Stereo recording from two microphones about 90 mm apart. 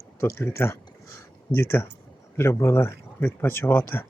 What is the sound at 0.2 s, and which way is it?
Speech, 30° left (ahead or behind).